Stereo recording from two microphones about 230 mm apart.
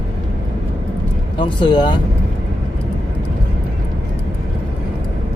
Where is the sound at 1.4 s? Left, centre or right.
Left.